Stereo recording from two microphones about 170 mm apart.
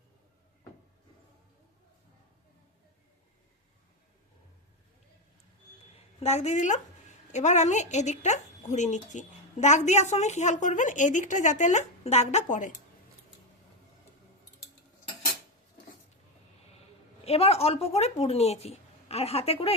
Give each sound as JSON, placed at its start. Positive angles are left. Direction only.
{"t": 6.1, "sound": "speech", "side_deg": 40}
{"t": 17.2, "sound": "speech", "side_deg": 35}